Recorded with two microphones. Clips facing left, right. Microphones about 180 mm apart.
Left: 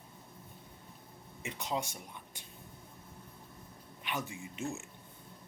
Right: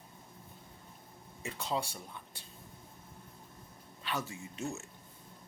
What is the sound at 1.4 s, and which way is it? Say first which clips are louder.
Speech: right 1 dB; 20° left (ahead or behind).